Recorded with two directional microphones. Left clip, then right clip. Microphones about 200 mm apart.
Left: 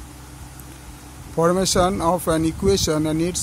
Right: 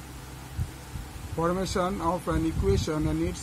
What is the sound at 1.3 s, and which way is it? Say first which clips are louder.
Speech: left 9 dB; 55° left (ahead or behind).